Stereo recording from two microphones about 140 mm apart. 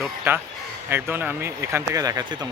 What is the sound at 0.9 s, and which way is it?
A man's voice, 15° right (ahead or behind).